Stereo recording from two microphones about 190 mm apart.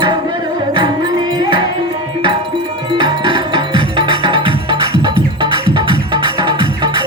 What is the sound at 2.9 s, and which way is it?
Music, 25° right (ahead or behind).